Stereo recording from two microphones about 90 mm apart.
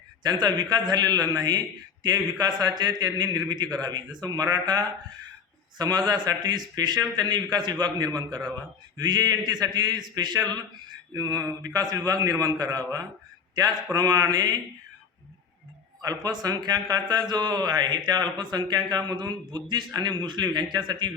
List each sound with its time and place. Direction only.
0.2 s speech: 50° right (ahead or behind)
11.1 s speech: 35° right (ahead or behind)
16.0 s speech: 45° right (ahead or behind)